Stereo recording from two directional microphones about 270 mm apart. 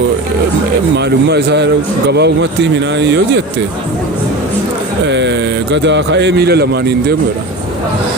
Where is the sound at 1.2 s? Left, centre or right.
Right.